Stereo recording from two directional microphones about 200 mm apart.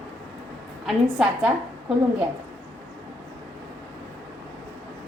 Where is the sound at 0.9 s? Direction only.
5° right (ahead or behind).